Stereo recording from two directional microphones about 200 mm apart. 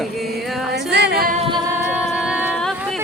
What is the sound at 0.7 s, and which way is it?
Music, 55° right (ahead or behind).